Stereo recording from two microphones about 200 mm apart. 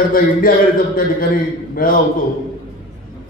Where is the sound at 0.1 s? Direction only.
45° left (ahead or behind).